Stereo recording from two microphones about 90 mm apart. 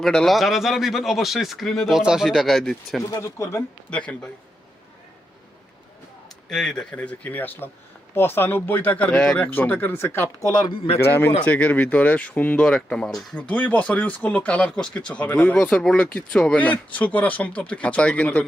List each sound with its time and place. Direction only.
0.0 s speech: 5° left (ahead or behind)
3.1 s speech: 35° left (ahead or behind)
3.8 s speech: 10° left (ahead or behind)
6.5 s speech: 5° left (ahead or behind)
6.9 s speech: 15° left (ahead or behind)
16.3 s speech: 5° left (ahead or behind)
16.9 s speech: 15° left (ahead or behind)